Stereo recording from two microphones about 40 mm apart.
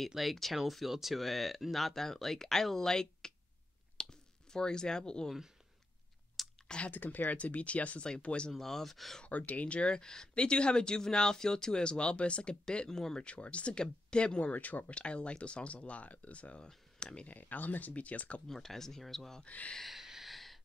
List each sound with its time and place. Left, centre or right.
0.1 s speech: centre
4.0 s a sound: centre
6.4 s a sound: centre
6.9 s speech: left
8.5 s speech: centre
9.2 s speech: left
12.7 s speech: centre
13.2 s speech: left
14.4 s speech: left
14.9 s speech: left
17.3 s speech: left
18.5 s speech: centre
19.4 s speech: left
19.9 s a sound: centre